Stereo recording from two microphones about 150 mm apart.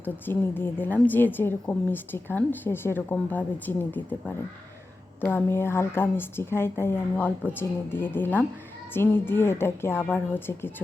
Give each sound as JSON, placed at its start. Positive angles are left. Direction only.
{"t": 0.0, "sound": "a woman's voice", "side_deg": 15}